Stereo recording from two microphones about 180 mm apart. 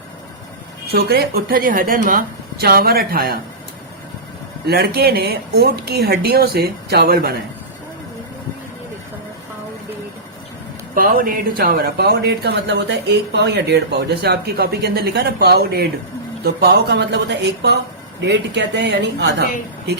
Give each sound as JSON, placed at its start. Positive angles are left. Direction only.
{"t": 0.9, "sound": "speech", "side_deg": -60}
{"t": 4.6, "sound": "speech", "side_deg": -60}
{"t": 10.9, "sound": "a woman's voice", "side_deg": -50}